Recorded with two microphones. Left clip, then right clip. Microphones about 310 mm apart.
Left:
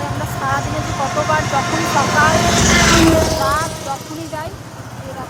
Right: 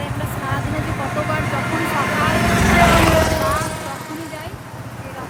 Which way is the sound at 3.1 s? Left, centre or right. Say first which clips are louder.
Left 2 dB; right.